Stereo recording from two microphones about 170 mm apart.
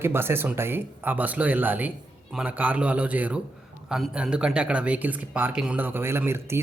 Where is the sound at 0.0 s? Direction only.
15° right (ahead or behind).